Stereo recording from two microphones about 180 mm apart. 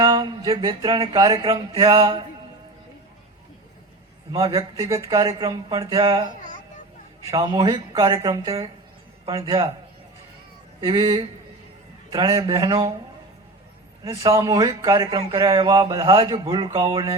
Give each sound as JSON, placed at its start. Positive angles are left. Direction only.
{"t": 0.0, "sound": "a sound", "side_deg": -20}
{"t": 1.0, "sound": "speech", "side_deg": -25}
{"t": 4.3, "sound": "speech", "side_deg": -20}
{"t": 10.8, "sound": "speech", "side_deg": -25}
{"t": 14.0, "sound": "speech", "side_deg": -20}